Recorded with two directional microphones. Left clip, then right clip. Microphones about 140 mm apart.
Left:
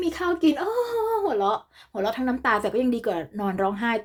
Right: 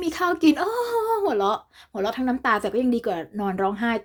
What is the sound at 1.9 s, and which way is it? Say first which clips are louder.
Speech: right 1 dB; 30° right (ahead or behind).